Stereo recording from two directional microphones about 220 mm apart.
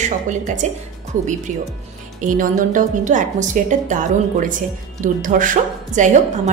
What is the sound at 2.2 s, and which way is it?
A woman's voice, 35° right (ahead or behind).